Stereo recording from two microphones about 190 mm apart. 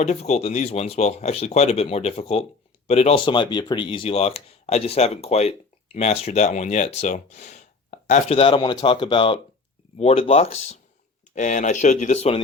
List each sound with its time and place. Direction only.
0.0 s speech: 35° left (ahead or behind)